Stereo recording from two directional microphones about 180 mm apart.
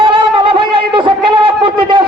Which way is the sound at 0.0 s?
25° right (ahead or behind).